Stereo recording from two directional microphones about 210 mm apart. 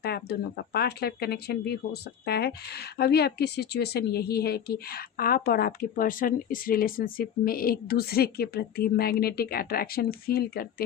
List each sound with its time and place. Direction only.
0.0 s speech: 50° left (ahead or behind)